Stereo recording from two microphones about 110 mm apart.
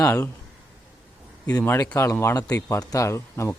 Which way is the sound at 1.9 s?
25° left (ahead or behind).